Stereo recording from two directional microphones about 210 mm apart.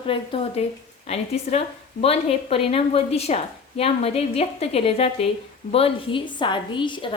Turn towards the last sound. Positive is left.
turn(degrees=25)  # may be behind; listen again after turning